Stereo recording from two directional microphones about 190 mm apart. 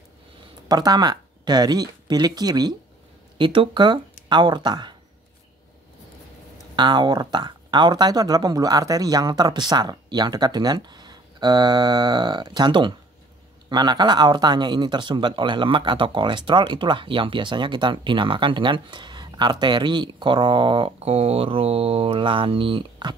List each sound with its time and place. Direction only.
0.7 s speech: 20° right (ahead or behind)
6.7 s speech: 25° right (ahead or behind)